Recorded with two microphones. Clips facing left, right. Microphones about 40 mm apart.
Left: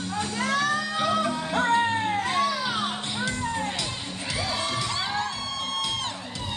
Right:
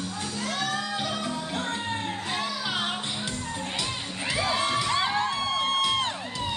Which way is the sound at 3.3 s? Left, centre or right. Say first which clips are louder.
Left 5 dB; left.